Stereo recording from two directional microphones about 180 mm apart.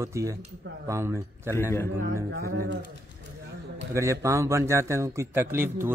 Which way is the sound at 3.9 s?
15° right (ahead or behind).